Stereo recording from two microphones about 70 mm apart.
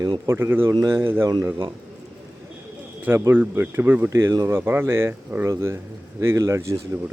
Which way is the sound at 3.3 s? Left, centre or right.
Right.